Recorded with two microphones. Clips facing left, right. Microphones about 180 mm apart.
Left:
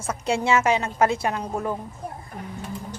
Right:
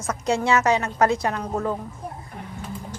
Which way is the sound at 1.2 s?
15° left (ahead or behind).